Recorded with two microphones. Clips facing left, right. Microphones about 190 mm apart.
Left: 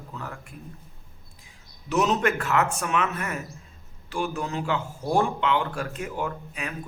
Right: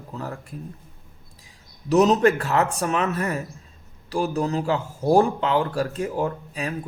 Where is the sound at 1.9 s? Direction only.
35° right (ahead or behind).